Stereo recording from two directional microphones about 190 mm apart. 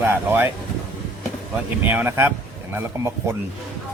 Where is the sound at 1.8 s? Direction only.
10° right (ahead or behind).